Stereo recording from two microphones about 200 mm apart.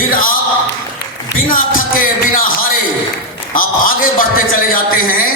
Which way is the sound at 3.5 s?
45° left (ahead or behind).